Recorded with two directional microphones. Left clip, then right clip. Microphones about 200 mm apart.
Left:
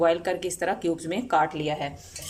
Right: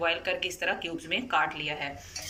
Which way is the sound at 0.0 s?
45° left (ahead or behind).